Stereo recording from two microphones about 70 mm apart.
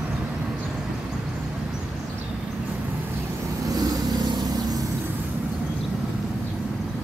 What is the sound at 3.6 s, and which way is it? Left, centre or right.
Vehicle, right.